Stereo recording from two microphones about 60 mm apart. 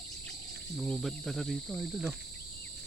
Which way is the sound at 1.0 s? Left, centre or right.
Centre.